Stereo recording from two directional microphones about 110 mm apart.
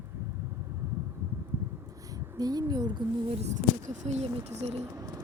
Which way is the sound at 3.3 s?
80° right.